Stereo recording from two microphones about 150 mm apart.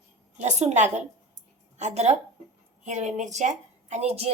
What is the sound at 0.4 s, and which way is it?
A woman's voice, 50° right (ahead or behind).